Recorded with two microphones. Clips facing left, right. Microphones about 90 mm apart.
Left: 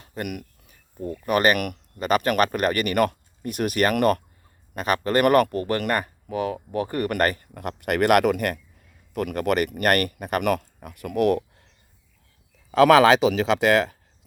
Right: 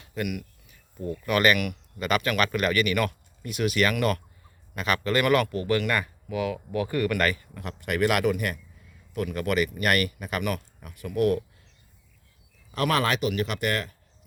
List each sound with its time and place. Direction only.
0.0 s a sound: 40° left (ahead or behind)
1.2 s speech: 40° left (ahead or behind); by 9.8 s 65° left (ahead or behind)
9.8 s speech: 50° left (ahead or behind); by 11.7 s 65° left (ahead or behind)
12.7 s speech: 90° left